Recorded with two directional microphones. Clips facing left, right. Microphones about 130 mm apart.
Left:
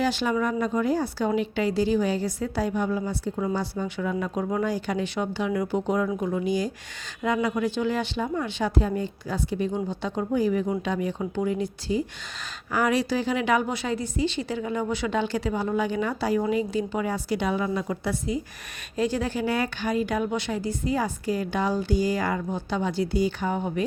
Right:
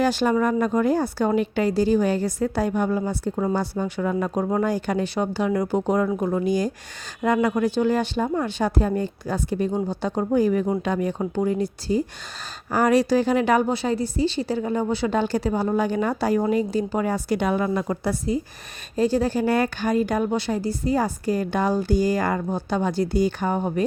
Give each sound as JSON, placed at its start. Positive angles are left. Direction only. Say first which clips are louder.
{"t": 0.0, "sound": "speech", "louder": "right 4 dB", "side_deg": -45}